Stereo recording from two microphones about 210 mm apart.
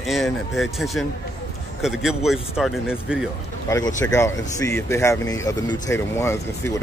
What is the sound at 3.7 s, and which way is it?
Speech, 15° left (ahead or behind).